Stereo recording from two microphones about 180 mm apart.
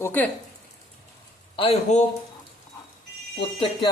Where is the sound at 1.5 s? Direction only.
35° left (ahead or behind).